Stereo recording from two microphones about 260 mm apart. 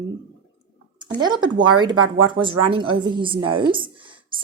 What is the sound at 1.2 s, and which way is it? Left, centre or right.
Speech, centre.